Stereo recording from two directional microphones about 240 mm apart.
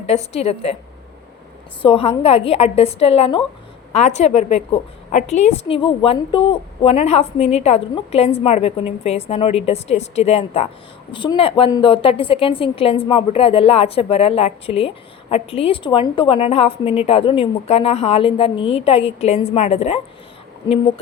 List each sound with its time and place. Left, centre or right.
0.1 s a woman's voice: left
1.8 s a woman's voice: left